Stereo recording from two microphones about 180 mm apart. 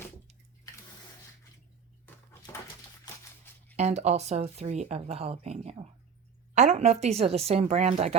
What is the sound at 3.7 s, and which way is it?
Speech, 40° right (ahead or behind).